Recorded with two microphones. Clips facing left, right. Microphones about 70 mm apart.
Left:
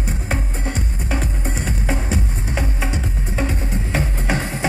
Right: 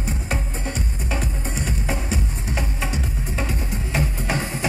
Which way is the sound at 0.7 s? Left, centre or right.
Left.